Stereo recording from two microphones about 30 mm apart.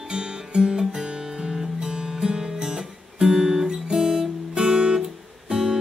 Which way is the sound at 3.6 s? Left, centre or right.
Centre.